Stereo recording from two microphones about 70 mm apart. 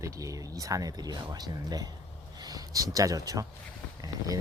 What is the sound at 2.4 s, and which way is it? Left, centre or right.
Speech, right.